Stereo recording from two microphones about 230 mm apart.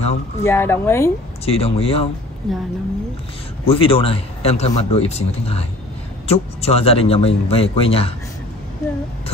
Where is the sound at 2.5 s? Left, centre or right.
Centre.